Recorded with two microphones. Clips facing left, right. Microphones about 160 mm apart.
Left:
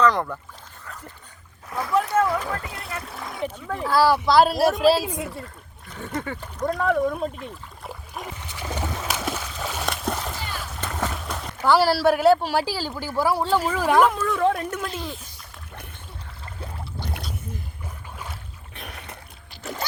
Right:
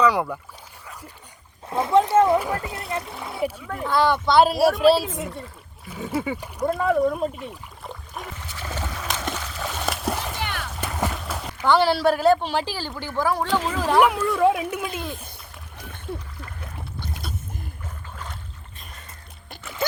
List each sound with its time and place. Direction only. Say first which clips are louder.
0.0 s speech: even; 10° right (ahead or behind)
1.7 s speech: right 5 dB; 25° right (ahead or behind)
3.1 s speech: right 3 dB; 5° right (ahead or behind)
3.7 s speech: left 3 dB; 5° left (ahead or behind)
8.5 s boat: left 3 dB; 15° left (ahead or behind)
9.0 s a sound: left 1 dB; 5° left (ahead or behind)
9.8 s splash: right 2 dB; 5° right (ahead or behind)
10.4 s splash: right 3 dB; 70° right (ahead or behind)
10.8 s speech: right 1 dB; 10° right (ahead or behind); by 13.5 s 10° left (ahead or behind)
14.2 s speech: right 2 dB; 10° right (ahead or behind)
18.7 s boat: left 11 dB; 65° left (ahead or behind)